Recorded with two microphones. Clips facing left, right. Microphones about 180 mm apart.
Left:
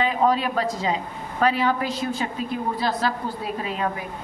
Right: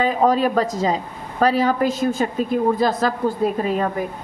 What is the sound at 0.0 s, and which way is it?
A woman's voice, 45° right (ahead or behind).